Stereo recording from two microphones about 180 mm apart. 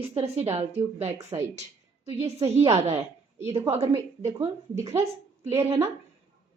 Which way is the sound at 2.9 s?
15° right (ahead or behind).